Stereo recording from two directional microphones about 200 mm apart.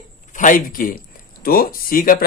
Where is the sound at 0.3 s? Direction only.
40° left (ahead or behind).